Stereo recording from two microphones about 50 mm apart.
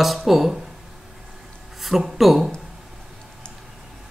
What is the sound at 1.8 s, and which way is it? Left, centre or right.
Speech, centre.